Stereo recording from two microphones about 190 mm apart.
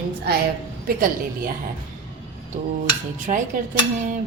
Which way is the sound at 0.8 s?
50° right (ahead or behind).